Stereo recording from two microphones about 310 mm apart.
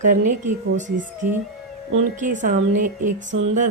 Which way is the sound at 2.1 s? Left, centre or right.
Right.